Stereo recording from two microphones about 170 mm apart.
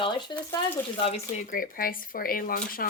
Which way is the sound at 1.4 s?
50° left (ahead or behind).